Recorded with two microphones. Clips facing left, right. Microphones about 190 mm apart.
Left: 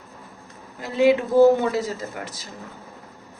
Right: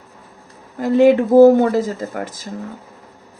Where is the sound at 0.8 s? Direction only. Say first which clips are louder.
Right 6 dB; 50° right (ahead or behind).